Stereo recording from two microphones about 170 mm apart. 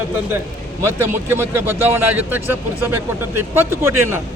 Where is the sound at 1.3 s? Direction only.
15° right (ahead or behind).